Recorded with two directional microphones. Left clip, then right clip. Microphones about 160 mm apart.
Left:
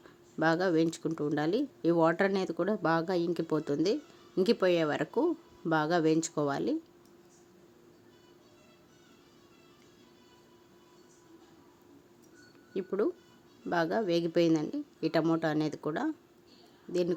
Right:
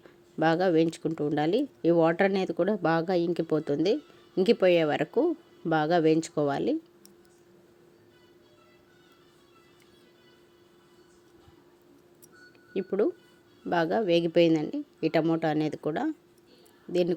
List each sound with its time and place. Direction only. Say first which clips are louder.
0.3 s speech: right 4 dB; 15° right (ahead or behind)
12.7 s speech: right 4 dB; 15° right (ahead or behind)